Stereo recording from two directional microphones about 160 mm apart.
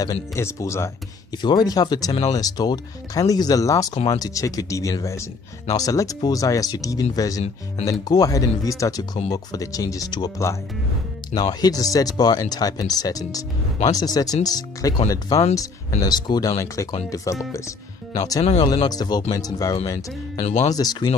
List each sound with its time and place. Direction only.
0.0 s speech: 20° left (ahead or behind)
3.9 s speech: 40° left (ahead or behind)
4.2 s speech: 20° left (ahead or behind)
11.6 s speech: 20° left (ahead or behind)
20.4 s speech: 45° left (ahead or behind)
20.7 s speech: 25° left (ahead or behind)